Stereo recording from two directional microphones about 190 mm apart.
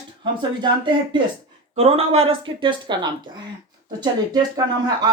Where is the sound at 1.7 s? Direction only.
30° right (ahead or behind).